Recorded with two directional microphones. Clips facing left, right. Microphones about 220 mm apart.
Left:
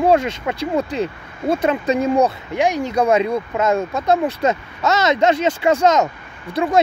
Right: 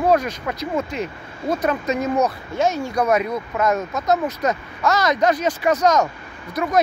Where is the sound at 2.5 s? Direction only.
15° left (ahead or behind).